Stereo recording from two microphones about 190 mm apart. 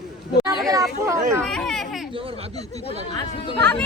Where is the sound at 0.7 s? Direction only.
15° right (ahead or behind).